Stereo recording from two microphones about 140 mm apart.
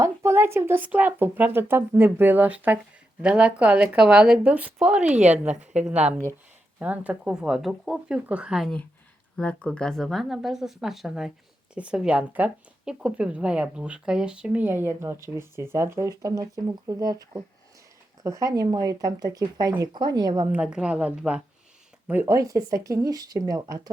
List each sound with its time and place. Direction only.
0.0 s speech: 20° right (ahead or behind)
20.5 s speech: 10° right (ahead or behind); by 23.9 s 25° right (ahead or behind)